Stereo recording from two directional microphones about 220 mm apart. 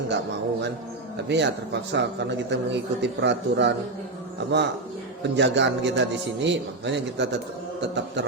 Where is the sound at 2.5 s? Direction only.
50° right (ahead or behind).